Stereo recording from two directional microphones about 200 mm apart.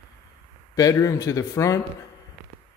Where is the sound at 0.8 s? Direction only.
15° left (ahead or behind).